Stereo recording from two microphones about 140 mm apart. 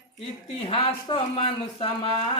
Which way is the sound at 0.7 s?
40° left (ahead or behind).